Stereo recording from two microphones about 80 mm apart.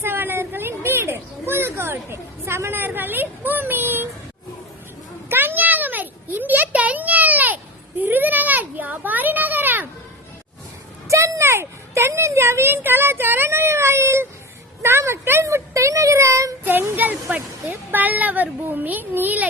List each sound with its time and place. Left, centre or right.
0.0 s children playing: right
5.3 s a sound: right
11.1 s a child's voice: right
16.6 s speech: right